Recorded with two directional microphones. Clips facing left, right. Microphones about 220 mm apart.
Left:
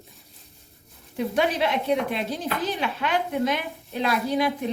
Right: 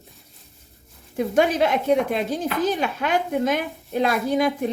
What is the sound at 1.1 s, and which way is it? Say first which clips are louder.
A woman's voice: right 4 dB; 50° right (ahead or behind).